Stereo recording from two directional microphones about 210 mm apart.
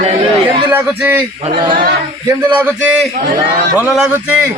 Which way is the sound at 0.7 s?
10° right (ahead or behind).